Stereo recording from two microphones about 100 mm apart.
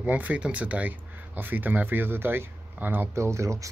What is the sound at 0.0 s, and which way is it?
Speech, 15° right (ahead or behind).